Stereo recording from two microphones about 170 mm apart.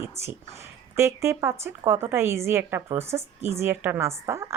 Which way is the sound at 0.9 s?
15° right (ahead or behind).